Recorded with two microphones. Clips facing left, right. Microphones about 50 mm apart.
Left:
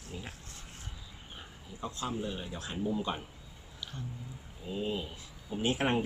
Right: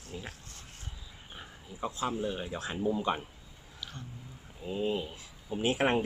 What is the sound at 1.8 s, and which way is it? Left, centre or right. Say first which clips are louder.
Speech: right 4 dB; centre.